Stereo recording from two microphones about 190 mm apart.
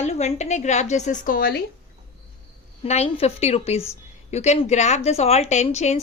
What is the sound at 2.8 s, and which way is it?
A woman's voice, 35° left (ahead or behind).